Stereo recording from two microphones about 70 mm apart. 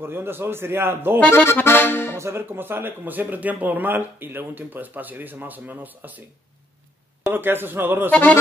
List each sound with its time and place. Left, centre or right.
0.0 s a man's voice: right
1.3 s accordion: left
2.1 s speech: right
7.2 s a man's voice: right
8.1 s a man's voice: centre